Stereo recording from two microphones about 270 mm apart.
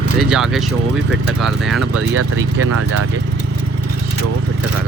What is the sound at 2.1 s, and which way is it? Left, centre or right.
Speech, right.